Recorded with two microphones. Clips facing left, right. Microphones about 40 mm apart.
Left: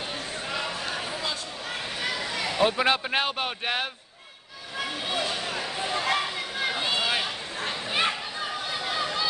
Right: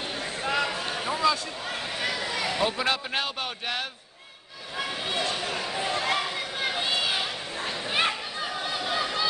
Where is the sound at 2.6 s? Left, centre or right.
Left.